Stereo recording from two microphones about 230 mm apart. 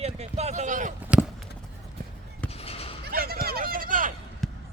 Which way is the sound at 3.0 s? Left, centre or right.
Right.